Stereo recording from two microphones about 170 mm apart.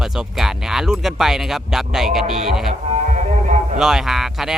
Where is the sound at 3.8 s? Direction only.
Centre (ahead or behind).